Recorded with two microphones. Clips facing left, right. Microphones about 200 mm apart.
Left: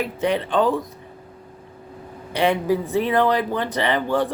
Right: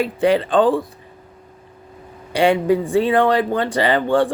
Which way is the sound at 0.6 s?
30° right (ahead or behind).